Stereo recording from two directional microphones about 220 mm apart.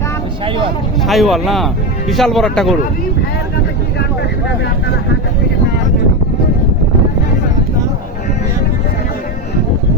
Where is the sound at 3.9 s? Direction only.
50° left (ahead or behind).